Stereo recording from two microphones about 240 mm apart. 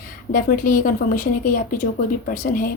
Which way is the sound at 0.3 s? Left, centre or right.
Left.